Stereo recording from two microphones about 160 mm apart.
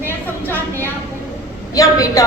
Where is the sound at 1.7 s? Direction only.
20° left (ahead or behind).